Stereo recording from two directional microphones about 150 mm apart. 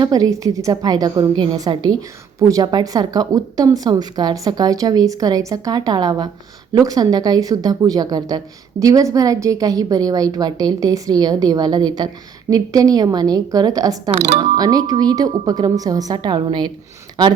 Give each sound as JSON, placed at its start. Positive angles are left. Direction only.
{"t": 0.0, "sound": "a woman's voice", "side_deg": -25}
{"t": 14.1, "sound": "speech", "side_deg": -45}
{"t": 14.3, "sound": "a woman's voice", "side_deg": -25}